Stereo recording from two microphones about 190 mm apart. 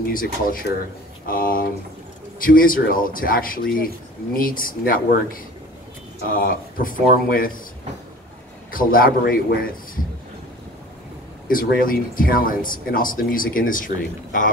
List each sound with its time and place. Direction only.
0.1 s speech: 50° left (ahead or behind)
8.7 s speech: 50° left (ahead or behind)
11.4 s a man's voice: 50° left (ahead or behind)